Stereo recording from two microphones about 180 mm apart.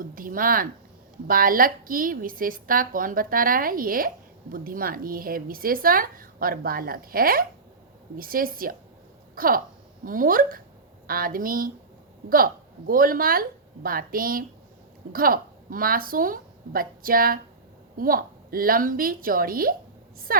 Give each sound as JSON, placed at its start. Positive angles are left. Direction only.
{"t": 0.0, "sound": "a sound", "side_deg": -50}
{"t": 1.3, "sound": "speech", "side_deg": -50}
{"t": 12.9, "sound": "a woman's voice", "side_deg": -50}